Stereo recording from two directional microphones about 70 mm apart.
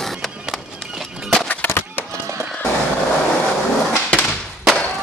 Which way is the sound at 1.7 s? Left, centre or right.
Left.